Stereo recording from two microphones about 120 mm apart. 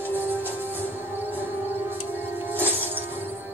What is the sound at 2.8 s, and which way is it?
Music, 15° right (ahead or behind).